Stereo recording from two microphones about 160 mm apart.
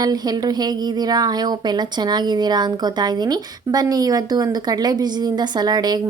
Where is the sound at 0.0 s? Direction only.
25° right (ahead or behind).